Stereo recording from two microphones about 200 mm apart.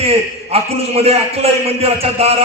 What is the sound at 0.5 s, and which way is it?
Music, 30° right (ahead or behind).